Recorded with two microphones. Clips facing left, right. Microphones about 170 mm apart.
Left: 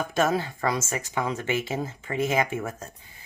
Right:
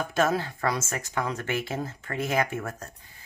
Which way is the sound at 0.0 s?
5° left (ahead or behind).